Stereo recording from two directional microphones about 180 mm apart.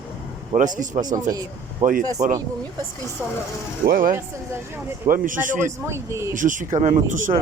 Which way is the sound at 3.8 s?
55° right (ahead or behind).